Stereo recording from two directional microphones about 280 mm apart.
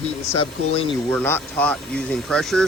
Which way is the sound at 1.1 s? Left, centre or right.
Centre.